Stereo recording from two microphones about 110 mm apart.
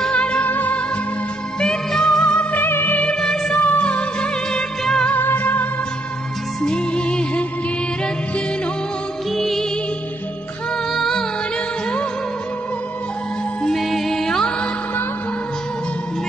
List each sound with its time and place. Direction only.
0.0 s music: 10° left (ahead or behind)
5.1 s music: 15° left (ahead or behind)
9.3 s music: centre (ahead or behind)
10.9 s music: 5° left (ahead or behind)
13.6 s music: 5° left (ahead or behind)